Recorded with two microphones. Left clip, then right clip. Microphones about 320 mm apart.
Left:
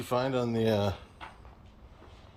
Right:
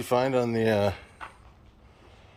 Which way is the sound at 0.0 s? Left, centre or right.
Centre.